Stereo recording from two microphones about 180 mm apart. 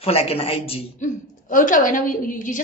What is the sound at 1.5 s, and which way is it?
A woman's voice, 50° left (ahead or behind).